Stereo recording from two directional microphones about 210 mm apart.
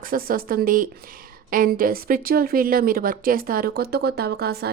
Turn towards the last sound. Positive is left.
turn(degrees=-50)  # may be behind; listen again after turning